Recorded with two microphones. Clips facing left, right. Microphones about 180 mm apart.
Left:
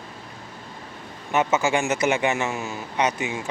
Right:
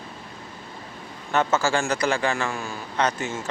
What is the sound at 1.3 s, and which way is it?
A man's voice, 20° left (ahead or behind).